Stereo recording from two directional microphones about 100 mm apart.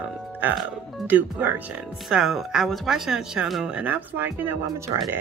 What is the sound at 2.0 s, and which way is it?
Speech, centre (ahead or behind).